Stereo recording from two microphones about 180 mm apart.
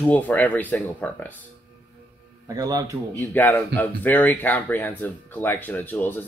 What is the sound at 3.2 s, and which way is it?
Speech, 10° left (ahead or behind).